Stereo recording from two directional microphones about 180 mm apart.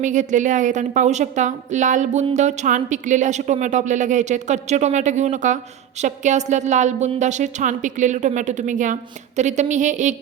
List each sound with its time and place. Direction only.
0.0 s a woman's voice: 45° right (ahead or behind)